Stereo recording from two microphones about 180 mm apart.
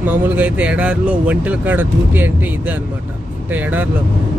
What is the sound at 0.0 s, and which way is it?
Speech, 10° right (ahead or behind).